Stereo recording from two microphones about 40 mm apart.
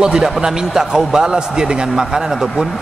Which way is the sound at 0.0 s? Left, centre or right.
Centre.